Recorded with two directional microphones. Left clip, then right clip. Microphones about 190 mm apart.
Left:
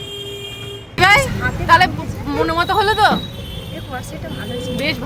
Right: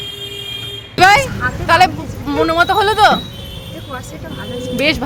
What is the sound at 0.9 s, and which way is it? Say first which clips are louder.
Vehicle: right 3 dB; 20° right (ahead or behind).